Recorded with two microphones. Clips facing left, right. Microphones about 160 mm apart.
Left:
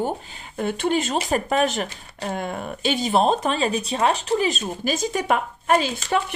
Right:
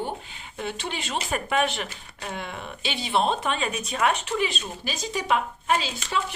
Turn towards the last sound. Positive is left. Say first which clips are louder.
# left 6 dB
turn(degrees=50)  # may be behind; listen again after turning